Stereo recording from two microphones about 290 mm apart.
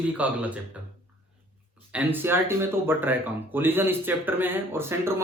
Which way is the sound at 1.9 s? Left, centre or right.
Centre.